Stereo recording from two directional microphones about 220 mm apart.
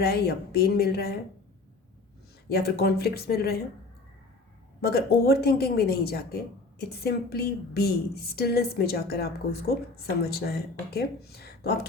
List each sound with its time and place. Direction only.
0.0 s a woman's voice: 45° left (ahead or behind)
2.5 s a woman's voice: 45° left (ahead or behind)
4.8 s a woman's voice: 45° left (ahead or behind)